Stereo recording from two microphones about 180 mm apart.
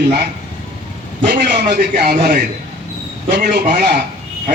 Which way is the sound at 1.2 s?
65° right (ahead or behind).